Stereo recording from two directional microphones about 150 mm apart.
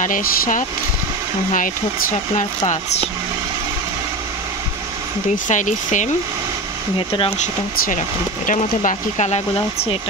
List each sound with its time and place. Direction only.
0.0 s speech: 60° left (ahead or behind)
5.5 s speech: 55° left (ahead or behind)
8.5 s speech: 55° left (ahead or behind)